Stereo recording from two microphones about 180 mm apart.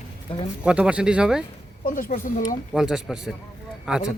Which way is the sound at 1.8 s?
50° left (ahead or behind).